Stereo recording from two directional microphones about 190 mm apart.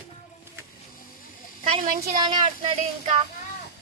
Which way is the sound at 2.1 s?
20° right (ahead or behind).